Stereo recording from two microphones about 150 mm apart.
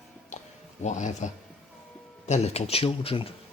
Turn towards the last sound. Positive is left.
turn(degrees=40)  # may be behind; listen again after turning